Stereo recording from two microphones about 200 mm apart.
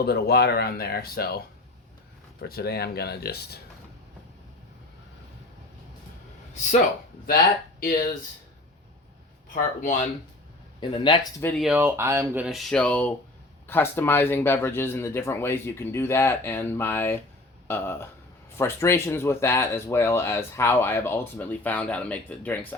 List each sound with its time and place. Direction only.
0.0 s speech: 55° left (ahead or behind)
2.4 s speech: 50° left (ahead or behind)
6.5 s speech: 40° left (ahead or behind)
10.8 s speech: 25° left (ahead or behind)
11.5 s speech: 5° right (ahead or behind)